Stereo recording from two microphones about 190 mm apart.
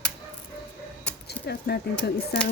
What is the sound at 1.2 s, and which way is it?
Keys jangling, 55° left (ahead or behind).